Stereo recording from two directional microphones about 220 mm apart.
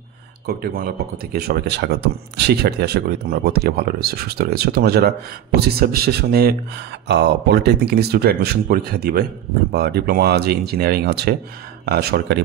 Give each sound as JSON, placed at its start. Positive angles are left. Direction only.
{"t": 0.5, "sound": "speech", "side_deg": -40}